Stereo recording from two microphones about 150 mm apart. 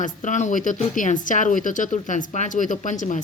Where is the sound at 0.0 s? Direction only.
55° left (ahead or behind).